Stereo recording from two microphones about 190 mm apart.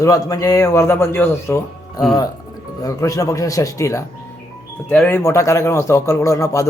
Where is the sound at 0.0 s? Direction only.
20° left (ahead or behind).